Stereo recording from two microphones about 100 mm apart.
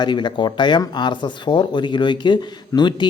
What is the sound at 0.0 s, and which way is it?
Speech, 50° left (ahead or behind).